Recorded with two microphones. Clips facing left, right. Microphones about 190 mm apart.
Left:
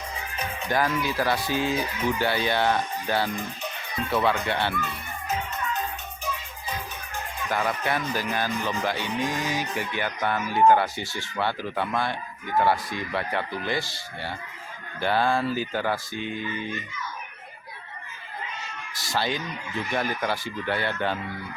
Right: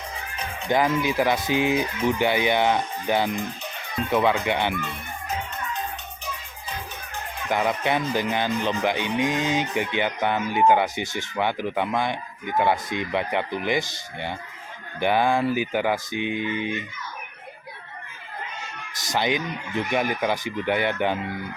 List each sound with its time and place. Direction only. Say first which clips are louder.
0.7 s speech: right 4 dB; 20° right (ahead or behind)
7.5 s speech: right 4 dB; 20° right (ahead or behind)
18.9 s speech: right 3 dB; 20° right (ahead or behind)